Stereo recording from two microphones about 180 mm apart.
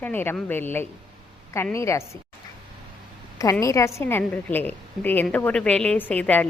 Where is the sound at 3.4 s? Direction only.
20° left (ahead or behind).